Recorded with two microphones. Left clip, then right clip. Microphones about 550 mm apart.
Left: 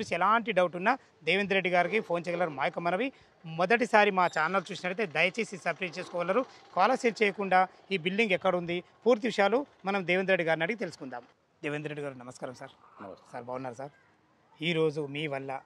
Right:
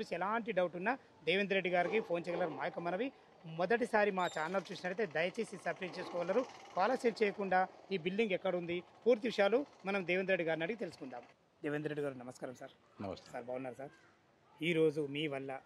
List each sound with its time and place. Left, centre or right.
0.0 s speech: left
11.7 s a man's voice: centre